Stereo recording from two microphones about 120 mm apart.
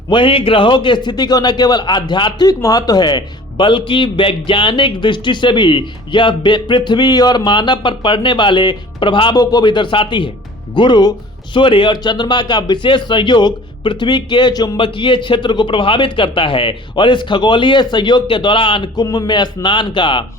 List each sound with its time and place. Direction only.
0.1 s a man's voice: 45° left (ahead or behind)